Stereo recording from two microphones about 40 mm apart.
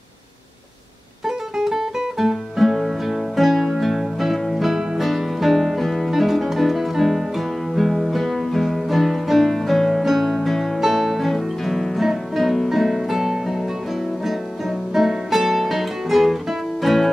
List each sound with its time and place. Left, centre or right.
1.6 s guitar: centre
7.7 s music: centre
15.0 s music: centre